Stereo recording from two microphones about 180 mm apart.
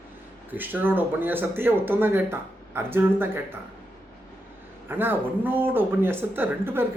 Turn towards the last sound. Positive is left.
turn(degrees=-10)  # may be behind; listen again after turning